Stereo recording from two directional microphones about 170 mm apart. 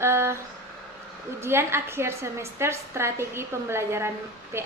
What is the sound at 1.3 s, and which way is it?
A woman's voice, 15° right (ahead or behind).